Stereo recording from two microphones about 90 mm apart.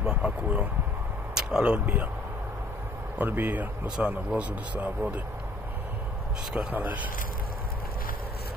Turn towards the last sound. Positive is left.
turn(degrees=-20)  # may be behind; listen again after turning